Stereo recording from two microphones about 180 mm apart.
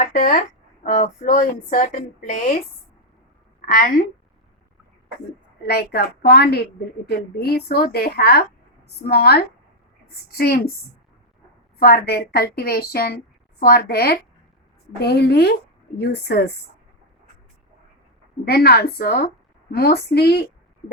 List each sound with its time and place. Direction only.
0.0 s speech: 50° left (ahead or behind)
3.7 s speech: 50° left (ahead or behind)
5.6 s a woman's voice: 60° left (ahead or behind)
11.8 s a woman's voice: 60° left (ahead or behind)
18.4 s a woman's voice: 60° left (ahead or behind)